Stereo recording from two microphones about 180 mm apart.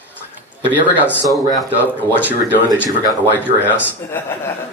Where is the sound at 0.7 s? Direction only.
10° right (ahead or behind).